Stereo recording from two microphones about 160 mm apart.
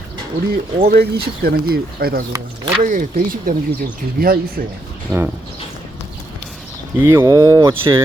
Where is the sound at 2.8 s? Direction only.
60° right (ahead or behind).